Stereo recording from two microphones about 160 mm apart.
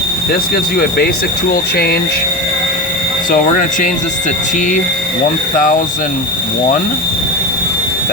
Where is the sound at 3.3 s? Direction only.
55° left (ahead or behind).